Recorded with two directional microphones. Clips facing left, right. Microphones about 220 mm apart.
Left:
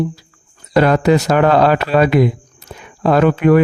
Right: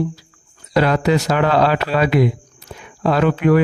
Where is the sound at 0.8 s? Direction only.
50° left (ahead or behind).